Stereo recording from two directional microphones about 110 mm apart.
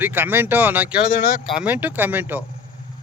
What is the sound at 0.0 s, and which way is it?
Speech, 20° right (ahead or behind).